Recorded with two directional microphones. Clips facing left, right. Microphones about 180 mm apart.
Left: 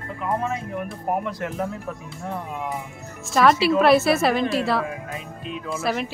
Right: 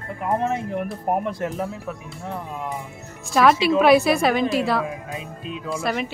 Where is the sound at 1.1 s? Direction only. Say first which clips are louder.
Right 2 dB; 45° right (ahead or behind).